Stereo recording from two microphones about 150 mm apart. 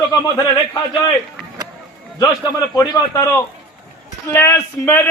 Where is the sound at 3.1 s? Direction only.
20° left (ahead or behind).